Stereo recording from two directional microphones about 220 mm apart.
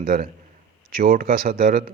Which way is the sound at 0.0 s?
40° right (ahead or behind).